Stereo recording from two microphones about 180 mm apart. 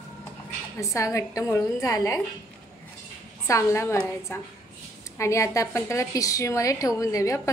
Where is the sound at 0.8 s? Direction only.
15° left (ahead or behind).